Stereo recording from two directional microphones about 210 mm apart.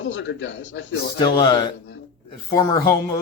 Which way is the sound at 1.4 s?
20° left (ahead or behind).